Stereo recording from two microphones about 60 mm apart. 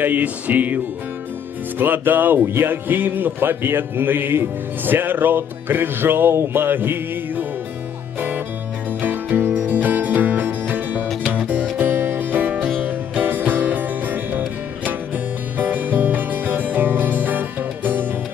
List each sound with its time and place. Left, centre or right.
0.0 s music: right
1.8 s speech: right
9.0 s music: right
11.8 s music: right